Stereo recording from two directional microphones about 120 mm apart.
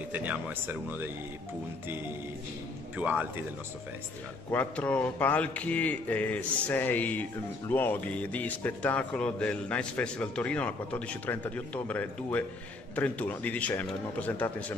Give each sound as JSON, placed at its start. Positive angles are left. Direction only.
{"t": 0.1, "sound": "speech", "side_deg": -15}
{"t": 3.0, "sound": "speech", "side_deg": -15}
{"t": 4.5, "sound": "speech", "side_deg": 15}